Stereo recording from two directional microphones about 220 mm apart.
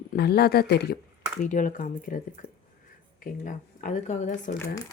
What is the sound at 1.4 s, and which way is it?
Speech, 35° left (ahead or behind).